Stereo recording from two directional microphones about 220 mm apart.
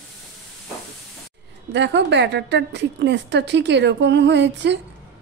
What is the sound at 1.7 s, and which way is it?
A woman's voice, 55° right (ahead or behind).